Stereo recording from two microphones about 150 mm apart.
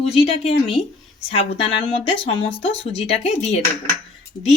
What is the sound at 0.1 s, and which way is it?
A woman's voice, 40° left (ahead or behind).